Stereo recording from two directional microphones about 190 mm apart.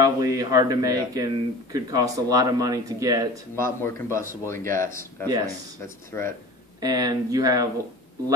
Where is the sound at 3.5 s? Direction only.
15° left (ahead or behind).